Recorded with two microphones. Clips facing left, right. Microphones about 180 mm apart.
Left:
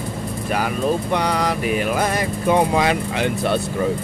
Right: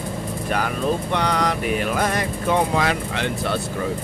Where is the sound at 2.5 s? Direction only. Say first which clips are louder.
Left 3 dB; 15° left (ahead or behind).